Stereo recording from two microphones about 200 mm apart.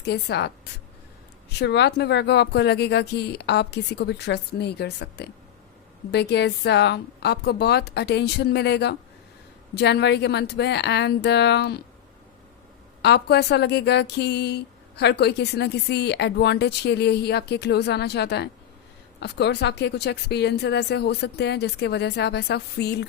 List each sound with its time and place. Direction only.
0.0 s speech: 55° left (ahead or behind)
13.0 s speech: 55° left (ahead or behind)